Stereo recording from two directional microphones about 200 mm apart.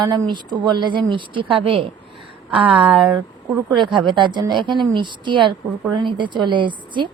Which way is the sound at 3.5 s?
25° right (ahead or behind).